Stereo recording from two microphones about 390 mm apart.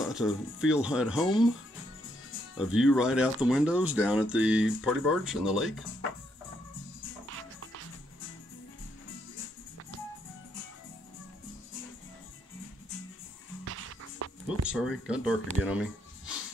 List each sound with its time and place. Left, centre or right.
0.0 s speech: centre
2.5 s speech: centre
13.7 s music: right
14.7 s speech: centre